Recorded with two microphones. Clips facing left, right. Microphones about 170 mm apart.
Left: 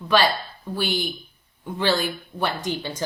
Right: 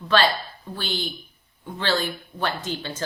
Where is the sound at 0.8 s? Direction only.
15° left (ahead or behind).